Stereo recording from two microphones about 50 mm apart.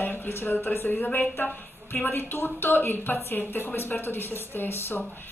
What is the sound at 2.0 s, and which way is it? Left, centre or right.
Speech, left.